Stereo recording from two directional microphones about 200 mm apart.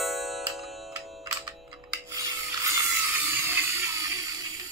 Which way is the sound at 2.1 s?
15° right (ahead or behind).